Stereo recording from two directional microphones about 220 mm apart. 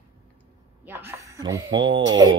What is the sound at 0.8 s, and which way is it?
Speech, 10° right (ahead or behind).